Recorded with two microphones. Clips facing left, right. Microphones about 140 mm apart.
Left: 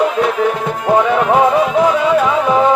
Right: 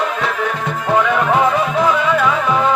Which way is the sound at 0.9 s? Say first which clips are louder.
Left 3 dB; 30° left (ahead or behind).